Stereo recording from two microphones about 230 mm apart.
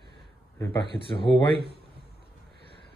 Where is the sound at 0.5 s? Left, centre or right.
Centre.